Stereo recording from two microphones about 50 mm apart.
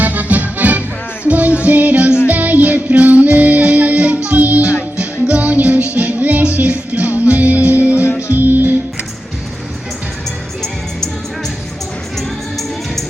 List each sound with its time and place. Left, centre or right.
0.0 s accordion: right
1.2 s music: right
10.6 s music: centre